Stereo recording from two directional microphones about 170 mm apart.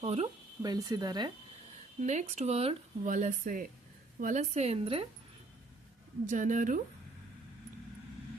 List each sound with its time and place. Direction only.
0.0 s speech: 40° right (ahead or behind)
0.6 s speech: 20° right (ahead or behind)
2.0 s speech: 45° right (ahead or behind)
3.1 s speech: 50° right (ahead or behind)
6.2 s speech: 45° right (ahead or behind)